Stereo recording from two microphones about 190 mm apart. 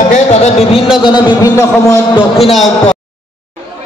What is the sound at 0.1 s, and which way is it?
Music, 35° left (ahead or behind).